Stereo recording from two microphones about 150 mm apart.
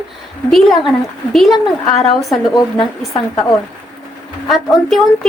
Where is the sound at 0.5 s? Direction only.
Centre (ahead or behind).